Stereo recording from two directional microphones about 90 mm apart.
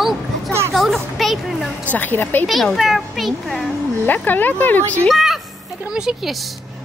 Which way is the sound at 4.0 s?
20° left (ahead or behind).